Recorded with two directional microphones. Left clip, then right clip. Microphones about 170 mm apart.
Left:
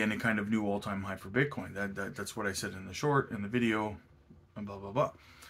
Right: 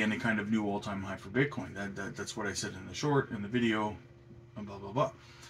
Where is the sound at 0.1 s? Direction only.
10° left (ahead or behind).